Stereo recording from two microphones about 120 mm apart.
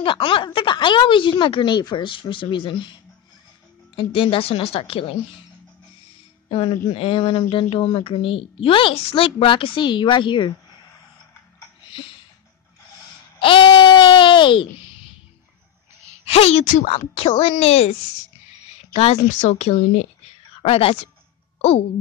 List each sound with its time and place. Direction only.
0.0 s a woman's voice: 45° left (ahead or behind)
3.9 s a woman's voice: 45° left (ahead or behind)
6.5 s a woman's voice: 45° left (ahead or behind)
13.4 s a sound: 45° left (ahead or behind)
16.3 s a woman's voice: 60° left (ahead or behind)
19.2 s speech: 65° left (ahead or behind)
20.6 s a woman's voice: 55° left (ahead or behind)